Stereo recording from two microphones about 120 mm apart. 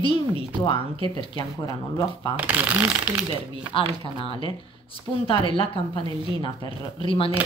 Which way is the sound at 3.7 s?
50° left (ahead or behind).